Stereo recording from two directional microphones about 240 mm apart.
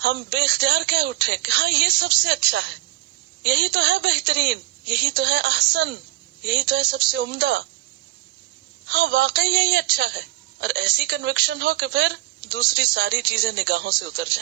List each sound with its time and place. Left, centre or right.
0.0 s a woman's voice: right
8.9 s a woman's voice: right